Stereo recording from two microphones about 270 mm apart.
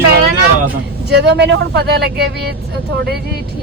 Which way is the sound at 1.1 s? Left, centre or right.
Right.